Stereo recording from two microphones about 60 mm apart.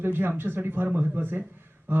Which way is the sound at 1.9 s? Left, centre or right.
Right.